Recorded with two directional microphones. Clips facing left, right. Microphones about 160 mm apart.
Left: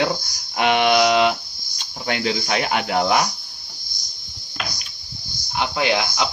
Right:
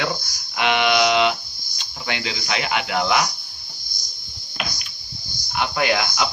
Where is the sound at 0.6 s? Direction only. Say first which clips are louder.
Left 2 dB; 40° left (ahead or behind).